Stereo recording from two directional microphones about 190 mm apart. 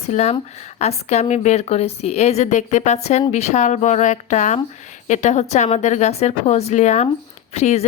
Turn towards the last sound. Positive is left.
turn(degrees=35)  # may be behind; listen again after turning